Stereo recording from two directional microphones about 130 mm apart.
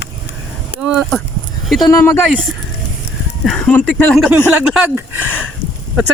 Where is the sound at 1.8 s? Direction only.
25° left (ahead or behind).